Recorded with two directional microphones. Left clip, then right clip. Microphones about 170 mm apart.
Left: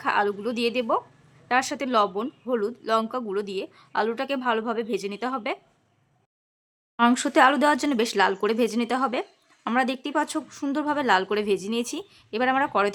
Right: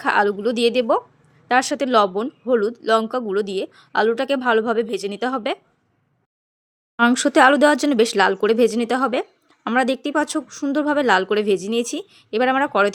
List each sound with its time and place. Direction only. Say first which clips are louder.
0.0 s speech: right 6 dB; 25° right (ahead or behind)
6.9 s speech: right 4 dB; 20° right (ahead or behind)